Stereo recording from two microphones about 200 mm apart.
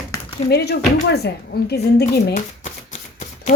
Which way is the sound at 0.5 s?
55° left (ahead or behind).